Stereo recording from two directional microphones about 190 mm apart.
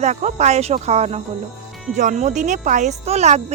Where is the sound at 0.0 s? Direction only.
35° right (ahead or behind).